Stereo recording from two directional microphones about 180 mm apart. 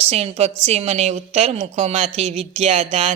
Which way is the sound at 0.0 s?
35° right (ahead or behind).